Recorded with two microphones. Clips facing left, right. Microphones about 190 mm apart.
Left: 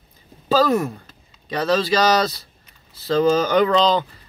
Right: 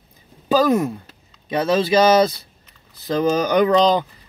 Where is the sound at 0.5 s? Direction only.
20° right (ahead or behind).